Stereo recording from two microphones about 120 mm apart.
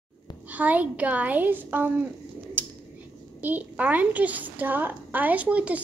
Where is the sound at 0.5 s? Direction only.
15° right (ahead or behind).